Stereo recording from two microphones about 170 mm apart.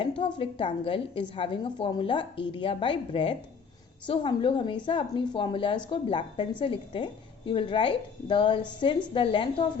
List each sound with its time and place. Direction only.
0.2 s a woman's voice: 30° left (ahead or behind)